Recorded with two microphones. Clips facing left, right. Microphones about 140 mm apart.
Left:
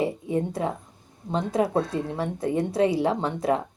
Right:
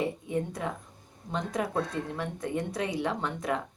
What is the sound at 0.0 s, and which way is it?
A woman's voice, 30° left (ahead or behind).